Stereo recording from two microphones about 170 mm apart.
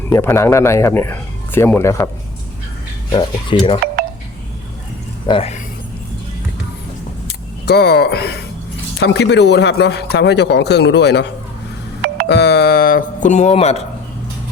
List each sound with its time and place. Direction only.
0.1 s a man's voice: 15° left (ahead or behind)
3.1 s speech: 25° left (ahead or behind)
5.2 s speech: 35° left (ahead or behind)
7.3 s speech: 75° left (ahead or behind)
9.0 s a man's voice: 90° left
12.3 s speech: 80° left; by 13.8 s 40° left (ahead or behind)